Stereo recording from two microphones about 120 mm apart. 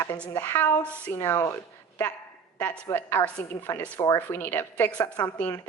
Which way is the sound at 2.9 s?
15° left (ahead or behind).